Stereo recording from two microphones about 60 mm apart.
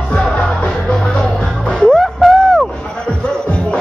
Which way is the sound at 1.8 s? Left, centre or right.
Centre.